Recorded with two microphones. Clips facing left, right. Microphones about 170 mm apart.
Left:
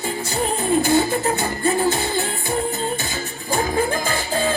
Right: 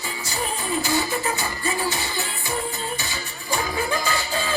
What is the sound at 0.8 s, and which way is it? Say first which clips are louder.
Music: left 6 dB; 55° left (ahead or behind).